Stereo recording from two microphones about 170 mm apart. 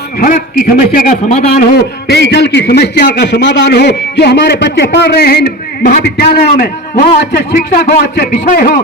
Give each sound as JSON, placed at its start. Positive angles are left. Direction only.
{"t": 0.2, "sound": "a man's voice", "side_deg": 55}
{"t": 1.4, "sound": "a man's voice", "side_deg": 75}
{"t": 8.4, "sound": "a man's voice", "side_deg": 60}